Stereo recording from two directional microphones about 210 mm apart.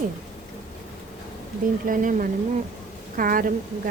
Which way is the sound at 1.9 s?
40° right (ahead or behind).